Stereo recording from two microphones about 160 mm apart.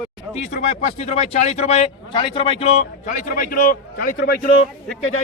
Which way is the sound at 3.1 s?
60° left (ahead or behind).